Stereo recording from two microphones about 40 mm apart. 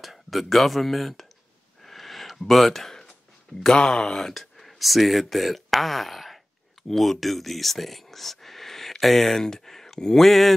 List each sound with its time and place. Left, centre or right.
0.0 s speech: centre
1.8 s gasp: centre
3.6 s speech: left; by 10.5 s centre